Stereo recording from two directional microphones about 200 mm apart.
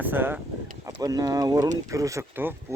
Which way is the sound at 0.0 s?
10° right (ahead or behind).